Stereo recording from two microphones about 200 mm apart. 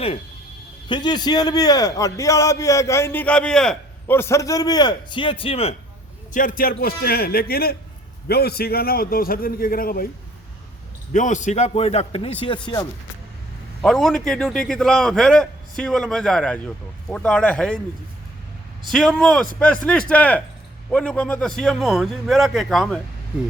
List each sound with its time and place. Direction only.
0.9 s a man's voice: 20° left (ahead or behind)
6.3 s a man's voice: 45° left (ahead or behind)
11.1 s speech: 40° left (ahead or behind)
13.8 s a man's voice: centre (ahead or behind)
18.9 s a man's voice: centre (ahead or behind)